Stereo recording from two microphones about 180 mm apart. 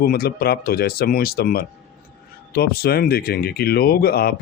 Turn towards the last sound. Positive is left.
turn(degrees=60)  # may be behind; listen again after turning